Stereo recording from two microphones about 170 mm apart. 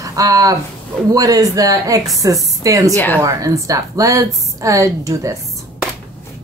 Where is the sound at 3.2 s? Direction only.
20° right (ahead or behind).